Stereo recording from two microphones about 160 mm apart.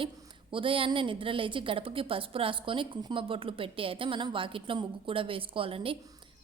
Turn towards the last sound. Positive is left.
turn(degrees=-35)  # may be behind; listen again after turning